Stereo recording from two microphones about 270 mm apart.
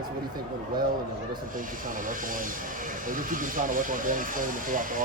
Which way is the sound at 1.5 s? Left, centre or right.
Right.